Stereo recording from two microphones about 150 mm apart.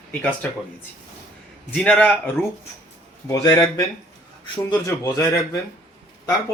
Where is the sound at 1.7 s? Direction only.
10° left (ahead or behind).